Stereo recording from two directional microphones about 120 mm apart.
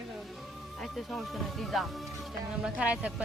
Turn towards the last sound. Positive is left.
turn(degrees=-10)  # may be behind; listen again after turning